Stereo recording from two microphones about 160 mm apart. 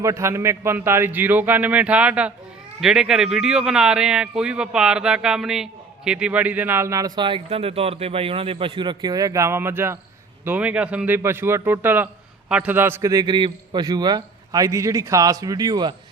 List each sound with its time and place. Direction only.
0.0 s a man's voice: 15° right (ahead or behind)